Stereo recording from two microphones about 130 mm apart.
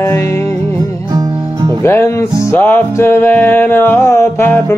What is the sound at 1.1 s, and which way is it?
Music, 30° right (ahead or behind).